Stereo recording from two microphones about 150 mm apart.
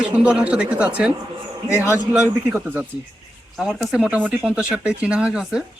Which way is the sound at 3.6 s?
5° right (ahead or behind).